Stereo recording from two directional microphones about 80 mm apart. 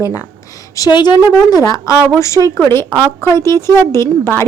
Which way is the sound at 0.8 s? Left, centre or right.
Left.